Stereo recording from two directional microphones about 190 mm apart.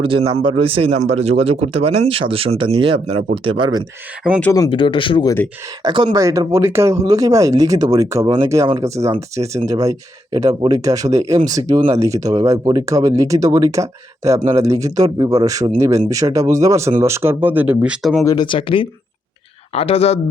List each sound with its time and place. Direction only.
0.0 s a man's voice: 30° right (ahead or behind)
4.5 s speech: 20° left (ahead or behind)
5.8 s speech: 25° right (ahead or behind); by 18.3 s centre (ahead or behind)
18.3 s speech: 25° left (ahead or behind)